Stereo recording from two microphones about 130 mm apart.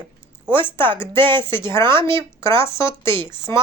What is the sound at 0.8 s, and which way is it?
Speech, 15° left (ahead or behind).